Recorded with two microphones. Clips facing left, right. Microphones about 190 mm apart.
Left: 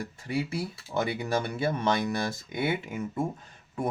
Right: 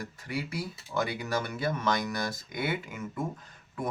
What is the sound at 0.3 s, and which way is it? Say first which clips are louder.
Speech: left 4 dB; 25° left (ahead or behind).